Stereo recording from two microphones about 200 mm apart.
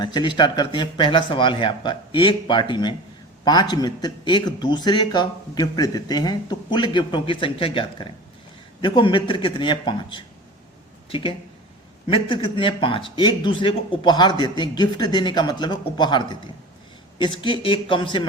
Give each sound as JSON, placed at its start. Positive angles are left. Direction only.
{"t": 0.0, "sound": "a man's voice", "side_deg": 25}